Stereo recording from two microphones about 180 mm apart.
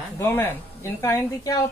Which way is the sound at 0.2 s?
10° left (ahead or behind).